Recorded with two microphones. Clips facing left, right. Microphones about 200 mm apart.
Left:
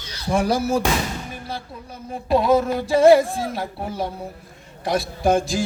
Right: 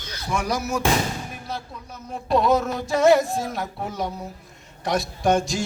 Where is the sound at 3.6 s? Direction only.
30° left (ahead or behind).